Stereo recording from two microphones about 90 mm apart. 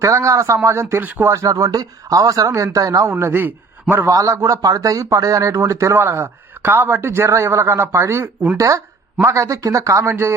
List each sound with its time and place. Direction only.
0.0 s speech: 35° right (ahead or behind)
1.0 s a man's voice: 20° right (ahead or behind)
1.3 s speech: 35° right (ahead or behind)
3.1 s a man's voice: 25° right (ahead or behind)
4.1 s a man's voice: 40° right (ahead or behind)